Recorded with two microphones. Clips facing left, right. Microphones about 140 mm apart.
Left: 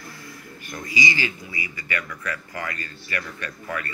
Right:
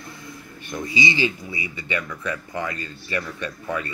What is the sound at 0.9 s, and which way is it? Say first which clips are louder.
Speech: right 3 dB; 25° right (ahead or behind).